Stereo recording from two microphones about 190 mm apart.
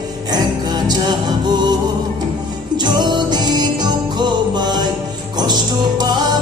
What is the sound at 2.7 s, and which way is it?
Music, 25° right (ahead or behind).